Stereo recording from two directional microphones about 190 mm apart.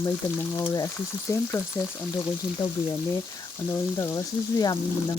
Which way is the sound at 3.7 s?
15° left (ahead or behind).